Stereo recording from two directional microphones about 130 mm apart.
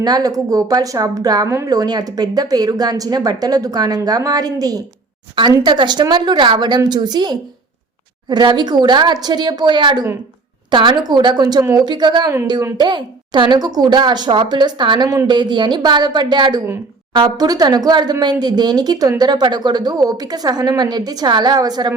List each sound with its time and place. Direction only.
0.0 s a woman's voice: 30° right (ahead or behind)